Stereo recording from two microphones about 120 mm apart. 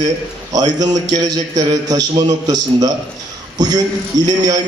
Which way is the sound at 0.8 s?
35° right (ahead or behind).